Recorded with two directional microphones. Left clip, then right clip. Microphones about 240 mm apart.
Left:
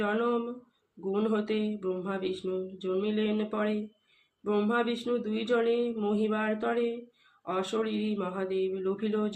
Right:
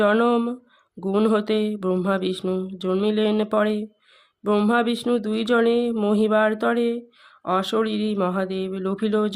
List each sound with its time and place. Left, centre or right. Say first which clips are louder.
0.0 s mantra: right 10 dB; right